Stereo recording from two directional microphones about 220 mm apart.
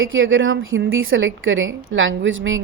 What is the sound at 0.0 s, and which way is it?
A woman's voice, 60° right (ahead or behind).